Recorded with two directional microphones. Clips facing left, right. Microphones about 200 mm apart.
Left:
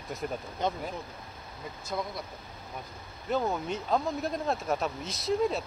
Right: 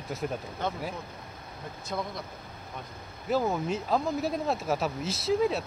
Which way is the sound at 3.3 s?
Centre (ahead or behind).